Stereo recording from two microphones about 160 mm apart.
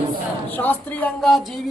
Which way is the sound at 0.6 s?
10° left (ahead or behind).